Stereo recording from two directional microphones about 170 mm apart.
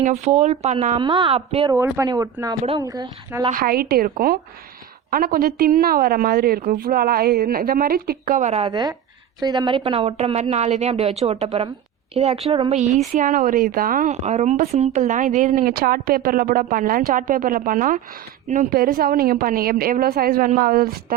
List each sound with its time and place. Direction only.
0.0 s a woman's voice: 40° right (ahead or behind)
1.0 s a woman's voice: 25° right (ahead or behind)
1.6 s speech: 15° right (ahead or behind)
3.5 s a woman's voice: 60° right (ahead or behind); by 8.7 s 40° right (ahead or behind)
8.7 s a woman's voice: 25° right (ahead or behind); by 21.2 s 60° right (ahead or behind)